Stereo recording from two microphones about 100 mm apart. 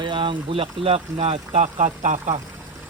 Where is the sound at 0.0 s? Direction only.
55° right (ahead or behind); by 1.6 s 80° right.